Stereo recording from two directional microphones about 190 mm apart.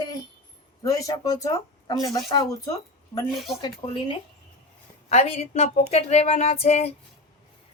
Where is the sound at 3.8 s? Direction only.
30° left (ahead or behind).